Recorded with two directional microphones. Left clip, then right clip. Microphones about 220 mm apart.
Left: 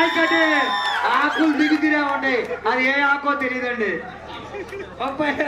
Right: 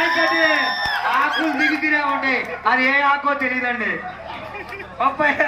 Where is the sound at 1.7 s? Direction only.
15° left (ahead or behind).